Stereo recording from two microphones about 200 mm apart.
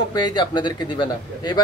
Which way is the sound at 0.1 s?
20° left (ahead or behind).